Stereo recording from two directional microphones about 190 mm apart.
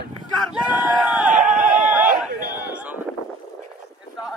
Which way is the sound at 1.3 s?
40° right (ahead or behind).